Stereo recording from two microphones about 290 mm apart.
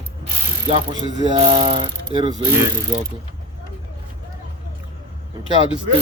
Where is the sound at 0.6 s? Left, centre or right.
Centre.